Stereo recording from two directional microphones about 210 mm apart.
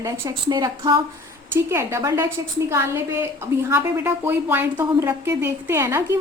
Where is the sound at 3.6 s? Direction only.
10° right (ahead or behind).